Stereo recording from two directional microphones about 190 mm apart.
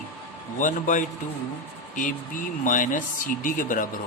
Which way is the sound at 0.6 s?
45° left (ahead or behind).